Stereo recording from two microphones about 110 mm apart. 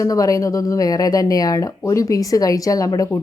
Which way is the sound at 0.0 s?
30° left (ahead or behind).